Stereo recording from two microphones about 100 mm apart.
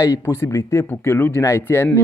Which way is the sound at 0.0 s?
30° left (ahead or behind).